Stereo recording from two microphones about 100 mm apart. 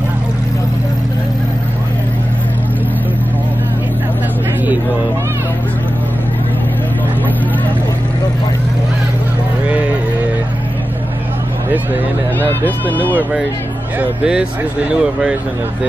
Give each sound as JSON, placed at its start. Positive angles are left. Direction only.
{"t": 12.4, "sound": "speech", "side_deg": 20}
{"t": 13.9, "sound": "speech", "side_deg": -10}